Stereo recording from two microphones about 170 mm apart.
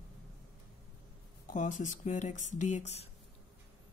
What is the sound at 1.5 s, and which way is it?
Speech, 50° left (ahead or behind).